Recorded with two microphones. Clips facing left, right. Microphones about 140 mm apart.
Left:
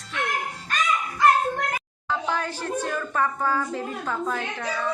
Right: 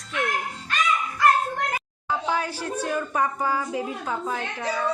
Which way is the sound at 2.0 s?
10° right (ahead or behind).